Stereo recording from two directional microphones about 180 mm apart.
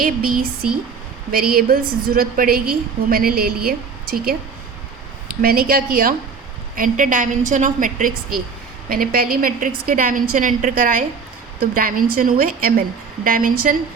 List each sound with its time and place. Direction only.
0.0 s a woman's voice: 50° right (ahead or behind)
5.4 s a woman's voice: 55° right (ahead or behind)